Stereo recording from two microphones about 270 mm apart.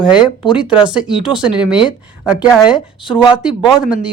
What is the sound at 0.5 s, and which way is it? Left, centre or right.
A woman's voice, centre.